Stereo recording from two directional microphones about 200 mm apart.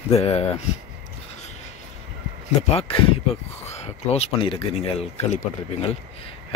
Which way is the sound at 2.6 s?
30° left (ahead or behind).